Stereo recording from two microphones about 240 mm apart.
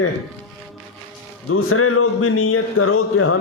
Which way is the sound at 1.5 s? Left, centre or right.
Left.